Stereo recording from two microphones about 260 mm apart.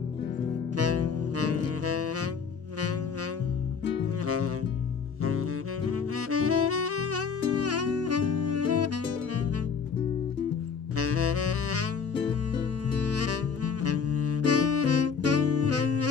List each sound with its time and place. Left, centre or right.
0.7 s saxophone: right
5.9 s saxophone: right
11.0 s saxophone: right
12.9 s music: right